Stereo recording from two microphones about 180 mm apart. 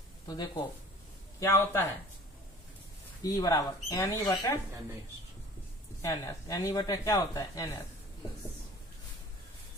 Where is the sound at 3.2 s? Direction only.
20° left (ahead or behind).